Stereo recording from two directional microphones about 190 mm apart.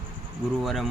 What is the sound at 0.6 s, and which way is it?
Speech, centre (ahead or behind).